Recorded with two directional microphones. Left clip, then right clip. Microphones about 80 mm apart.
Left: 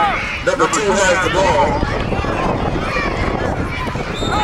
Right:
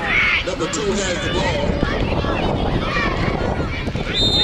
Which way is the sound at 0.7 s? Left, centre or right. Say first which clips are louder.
Left 7 dB; left.